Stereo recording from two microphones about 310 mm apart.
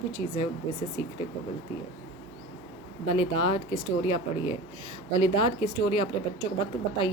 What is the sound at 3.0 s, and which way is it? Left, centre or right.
Speech, centre.